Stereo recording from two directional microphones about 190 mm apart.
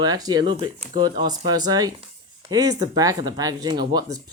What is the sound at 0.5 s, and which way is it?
Speech, 35° right (ahead or behind).